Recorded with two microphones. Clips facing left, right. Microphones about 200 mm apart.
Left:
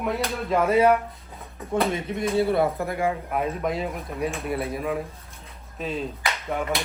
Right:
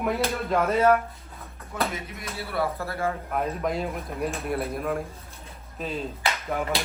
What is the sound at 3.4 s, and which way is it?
Speech, centre (ahead or behind).